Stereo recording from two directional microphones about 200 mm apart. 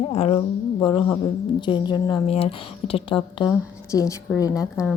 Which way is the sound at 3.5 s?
15° left (ahead or behind).